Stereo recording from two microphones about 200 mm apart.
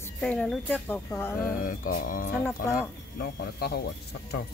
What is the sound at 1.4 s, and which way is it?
Speech, 45° left (ahead or behind).